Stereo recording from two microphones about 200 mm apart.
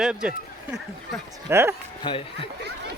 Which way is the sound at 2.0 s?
25° left (ahead or behind).